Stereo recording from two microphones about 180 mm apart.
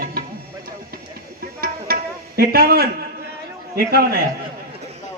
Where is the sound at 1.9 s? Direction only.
55° right (ahead or behind).